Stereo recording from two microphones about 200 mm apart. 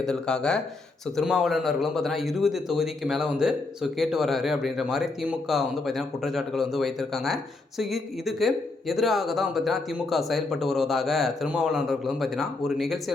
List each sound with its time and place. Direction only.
0.0 s speech: 5° left (ahead or behind)